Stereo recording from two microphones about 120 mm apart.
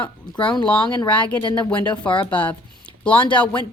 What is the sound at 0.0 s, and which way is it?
Speech, 10° left (ahead or behind).